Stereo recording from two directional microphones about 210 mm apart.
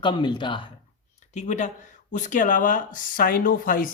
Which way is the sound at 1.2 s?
35° left (ahead or behind).